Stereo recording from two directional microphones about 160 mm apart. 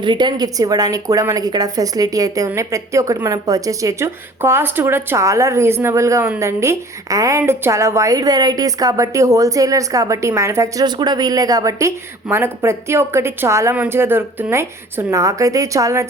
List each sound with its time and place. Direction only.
0.0 s speech: 30° right (ahead or behind)